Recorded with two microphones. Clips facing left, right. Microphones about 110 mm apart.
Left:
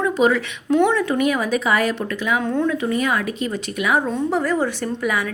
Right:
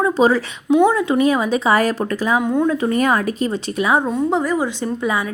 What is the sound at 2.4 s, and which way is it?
Speech, 10° right (ahead or behind).